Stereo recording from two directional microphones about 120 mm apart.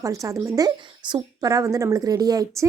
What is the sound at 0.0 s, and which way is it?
A woman's voice, 25° right (ahead or behind).